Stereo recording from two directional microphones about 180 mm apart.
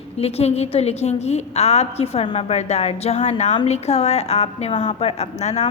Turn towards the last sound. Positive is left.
turn(degrees=40)  # may be behind; listen again after turning